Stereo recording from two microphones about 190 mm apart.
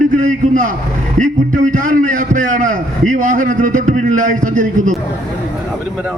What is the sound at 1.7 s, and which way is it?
A man's voice, 45° right (ahead or behind).